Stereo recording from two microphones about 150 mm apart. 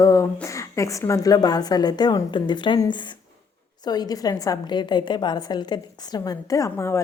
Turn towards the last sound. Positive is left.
turn(degrees=20)  # may be behind; listen again after turning